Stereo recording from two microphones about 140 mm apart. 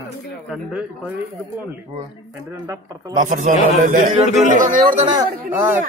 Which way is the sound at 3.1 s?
60° right (ahead or behind).